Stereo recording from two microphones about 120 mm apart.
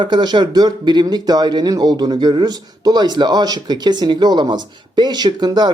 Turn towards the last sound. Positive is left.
turn(degrees=-35)  # may be behind; listen again after turning